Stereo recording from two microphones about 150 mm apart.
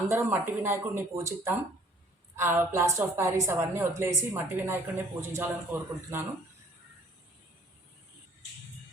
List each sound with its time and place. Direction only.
0.1 s a woman's voice: 15° right (ahead or behind)